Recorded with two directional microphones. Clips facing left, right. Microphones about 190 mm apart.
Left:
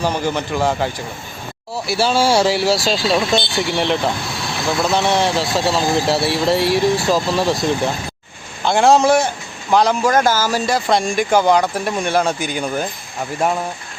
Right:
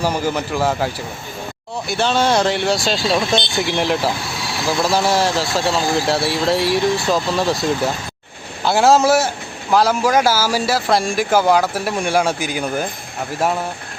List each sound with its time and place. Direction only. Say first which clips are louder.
0.0 s speech: even; 10° right (ahead or behind)
1.9 s speech: left 1 dB; 5° left (ahead or behind)
3.3 s speech: left 1 dB; 20° right (ahead or behind)
3.7 s speech: even; centre (ahead or behind)